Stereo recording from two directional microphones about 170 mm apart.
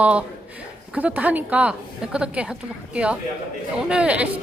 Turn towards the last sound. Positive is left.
turn(degrees=-5)  # may be behind; listen again after turning